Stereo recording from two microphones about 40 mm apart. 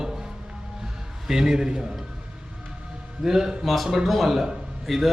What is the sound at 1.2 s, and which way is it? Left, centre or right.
Speech, centre.